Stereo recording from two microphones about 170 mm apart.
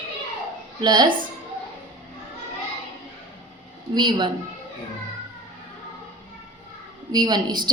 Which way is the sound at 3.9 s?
25° right (ahead or behind).